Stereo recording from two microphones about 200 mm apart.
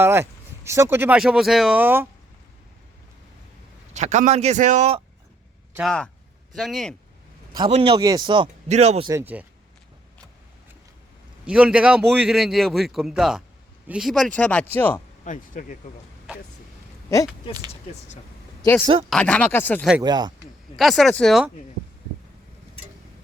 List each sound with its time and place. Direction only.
0.0 s speech: 10° right (ahead or behind)
3.9 s speech: 35° right (ahead or behind)
5.7 s a man's voice: centre (ahead or behind)
7.5 s speech: 25° right (ahead or behind)
8.6 s speech: 35° right (ahead or behind)
9.0 s speech: 10° right (ahead or behind)
11.4 s a man's voice: 5° right (ahead or behind)
15.2 s speech: 40° left (ahead or behind)
19.1 s speech: 5° left (ahead or behind)
20.0 s speech: 20° right (ahead or behind)
20.7 s a man's voice: centre (ahead or behind)